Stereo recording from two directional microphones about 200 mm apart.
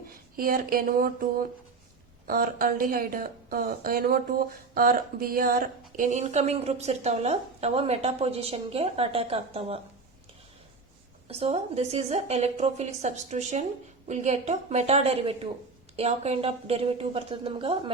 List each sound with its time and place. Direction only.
0.3 s a sound: 45° right (ahead or behind)
2.2 s a woman's voice: 45° right (ahead or behind); by 9.8 s 30° right (ahead or behind)
11.3 s a woman's voice: 30° right (ahead or behind)